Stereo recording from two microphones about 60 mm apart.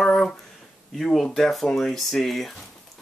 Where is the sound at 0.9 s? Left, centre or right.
Centre.